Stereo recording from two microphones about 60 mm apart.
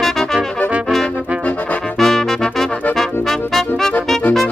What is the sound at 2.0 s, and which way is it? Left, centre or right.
Music, centre.